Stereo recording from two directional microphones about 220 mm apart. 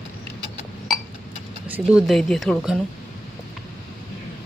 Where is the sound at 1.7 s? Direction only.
5° right (ahead or behind).